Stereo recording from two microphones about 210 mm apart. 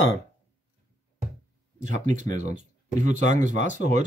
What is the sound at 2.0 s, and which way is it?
Speech, 35° right (ahead or behind).